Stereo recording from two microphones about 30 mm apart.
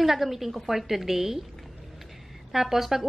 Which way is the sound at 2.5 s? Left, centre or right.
Centre.